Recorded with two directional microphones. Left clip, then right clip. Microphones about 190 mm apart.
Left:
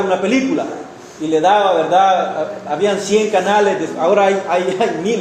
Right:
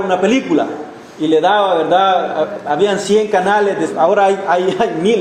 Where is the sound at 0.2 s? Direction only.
40° right (ahead or behind).